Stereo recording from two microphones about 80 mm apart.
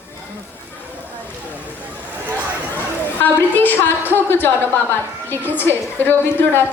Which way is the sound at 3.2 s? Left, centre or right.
Left.